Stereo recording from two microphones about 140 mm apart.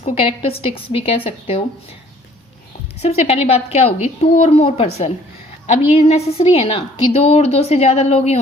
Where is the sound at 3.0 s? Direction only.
50° left (ahead or behind).